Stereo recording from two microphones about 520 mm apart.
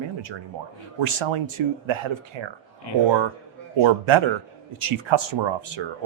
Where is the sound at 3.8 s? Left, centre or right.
Right.